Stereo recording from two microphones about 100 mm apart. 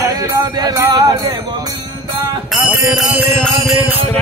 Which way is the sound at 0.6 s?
40° right (ahead or behind).